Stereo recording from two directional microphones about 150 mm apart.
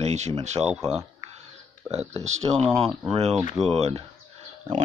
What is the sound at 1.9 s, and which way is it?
Speech, 45° right (ahead or behind).